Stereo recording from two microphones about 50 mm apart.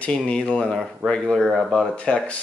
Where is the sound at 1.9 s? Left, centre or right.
Left.